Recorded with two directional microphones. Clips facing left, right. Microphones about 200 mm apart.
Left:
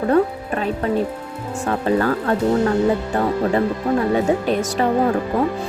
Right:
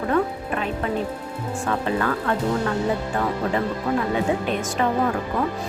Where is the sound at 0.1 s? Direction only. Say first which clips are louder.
Left 5 dB; 35° left (ahead or behind).